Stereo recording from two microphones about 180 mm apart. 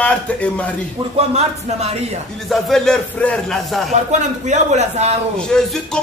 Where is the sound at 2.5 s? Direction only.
Centre (ahead or behind).